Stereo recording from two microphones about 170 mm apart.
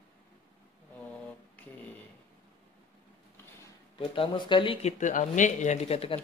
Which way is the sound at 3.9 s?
30° left (ahead or behind).